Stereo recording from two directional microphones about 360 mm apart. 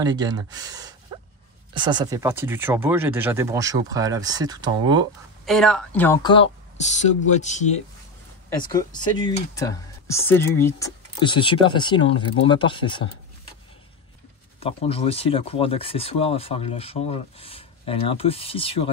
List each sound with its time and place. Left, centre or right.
0.0 s speech: centre
5.4 s speech: centre
14.6 s speech: centre